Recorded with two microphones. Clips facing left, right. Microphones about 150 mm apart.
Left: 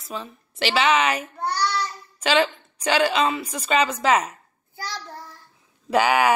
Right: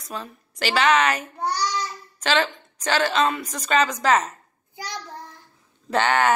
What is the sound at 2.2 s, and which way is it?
A woman's voice, 10° left (ahead or behind).